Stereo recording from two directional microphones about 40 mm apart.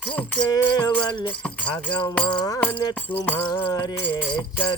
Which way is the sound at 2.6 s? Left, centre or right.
Left.